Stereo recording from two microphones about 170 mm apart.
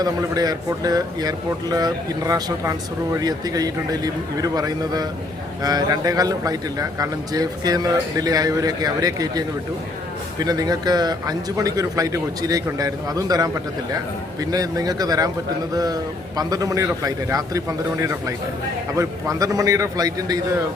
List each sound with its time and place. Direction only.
0.0 s a man's voice: 20° right (ahead or behind)
10.4 s a man's voice: 20° right (ahead or behind)